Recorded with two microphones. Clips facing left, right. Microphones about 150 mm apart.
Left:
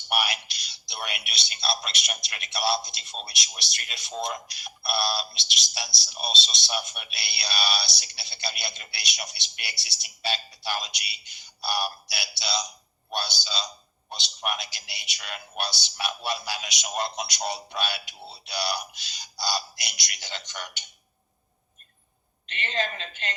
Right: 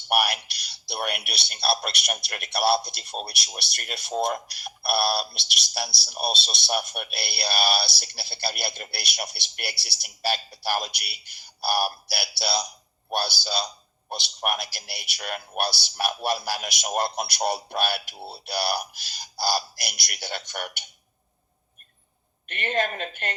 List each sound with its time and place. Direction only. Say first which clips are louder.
0.1 s a man's voice: right 4 dB; 60° right (ahead or behind)
22.4 s speech: right 4 dB; 55° right (ahead or behind)